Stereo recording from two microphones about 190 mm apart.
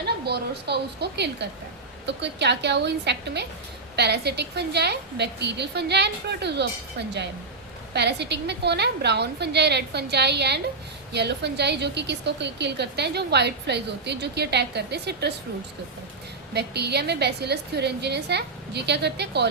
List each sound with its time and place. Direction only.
0.3 s a woman's voice: 60° right (ahead or behind)
7.9 s a woman's voice: 65° right (ahead or behind)
16.6 s a woman's voice: 60° right (ahead or behind)